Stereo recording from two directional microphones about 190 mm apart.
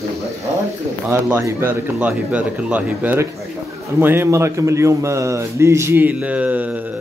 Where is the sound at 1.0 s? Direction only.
15° right (ahead or behind).